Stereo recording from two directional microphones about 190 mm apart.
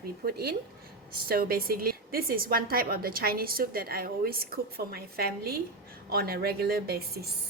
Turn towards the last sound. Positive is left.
turn(degrees=-55)  # may be behind; listen again after turning